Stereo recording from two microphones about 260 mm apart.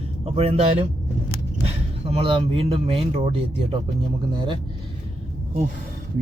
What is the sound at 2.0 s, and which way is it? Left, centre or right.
Speech, right.